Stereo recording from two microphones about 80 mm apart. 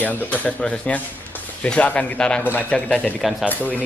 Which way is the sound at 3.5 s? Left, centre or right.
Left.